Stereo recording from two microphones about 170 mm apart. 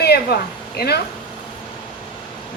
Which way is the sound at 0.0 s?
70° left (ahead or behind).